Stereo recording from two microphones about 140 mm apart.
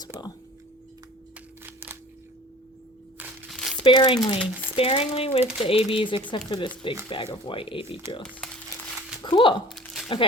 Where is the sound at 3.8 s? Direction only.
35° left (ahead or behind).